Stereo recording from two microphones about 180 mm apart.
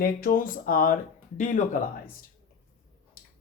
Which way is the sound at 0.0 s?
55° left (ahead or behind).